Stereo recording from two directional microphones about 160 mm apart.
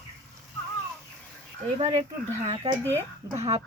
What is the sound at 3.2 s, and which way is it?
Speech, 20° right (ahead or behind).